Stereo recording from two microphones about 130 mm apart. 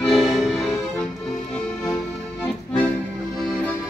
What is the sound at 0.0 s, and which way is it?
Accordion, centre (ahead or behind).